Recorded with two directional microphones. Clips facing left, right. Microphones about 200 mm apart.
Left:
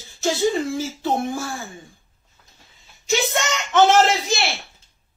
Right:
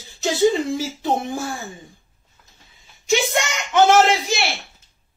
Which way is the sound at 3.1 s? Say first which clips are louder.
Right 2 dB; 10° right (ahead or behind).